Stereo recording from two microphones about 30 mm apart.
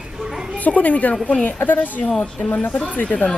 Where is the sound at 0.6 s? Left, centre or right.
Left.